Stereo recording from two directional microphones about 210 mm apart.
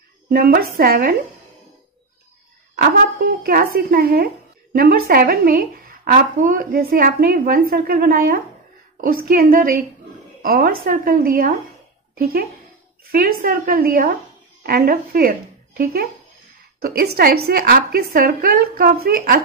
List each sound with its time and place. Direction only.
0.3 s a woman's voice: 45° right (ahead or behind)
2.7 s a woman's voice: 45° right (ahead or behind)